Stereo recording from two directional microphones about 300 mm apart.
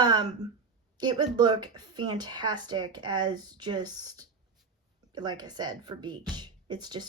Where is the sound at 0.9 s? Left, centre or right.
Centre.